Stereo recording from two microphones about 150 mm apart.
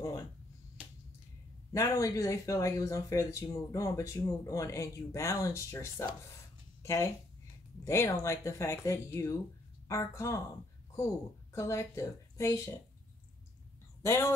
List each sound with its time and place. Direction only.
1.7 s speech: 20° left (ahead or behind)
6.8 s a sound: 20° left (ahead or behind)
7.8 s speech: 20° left (ahead or behind)
11.5 s speech: 20° left (ahead or behind)
14.0 s speech: 20° left (ahead or behind)